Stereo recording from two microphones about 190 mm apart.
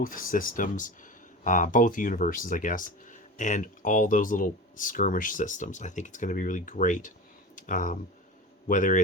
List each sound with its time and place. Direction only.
0.0 s speech: 45° left (ahead or behind)
7.5 s a sound: 45° left (ahead or behind)
8.6 s speech: 45° left (ahead or behind)